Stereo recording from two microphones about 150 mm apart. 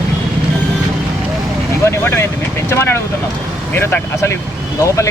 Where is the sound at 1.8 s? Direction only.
15° left (ahead or behind).